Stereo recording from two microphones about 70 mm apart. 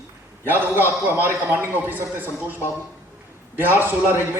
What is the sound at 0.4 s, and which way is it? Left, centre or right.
A man's voice, right.